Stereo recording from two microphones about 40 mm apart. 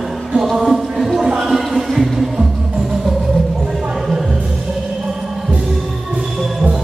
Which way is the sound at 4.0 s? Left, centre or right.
Centre.